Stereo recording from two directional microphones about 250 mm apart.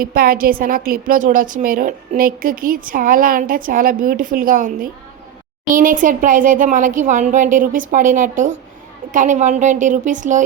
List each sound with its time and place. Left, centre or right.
0.0 s a woman's voice: right